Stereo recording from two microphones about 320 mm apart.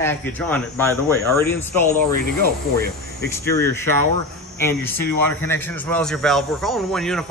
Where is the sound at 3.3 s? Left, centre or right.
Centre.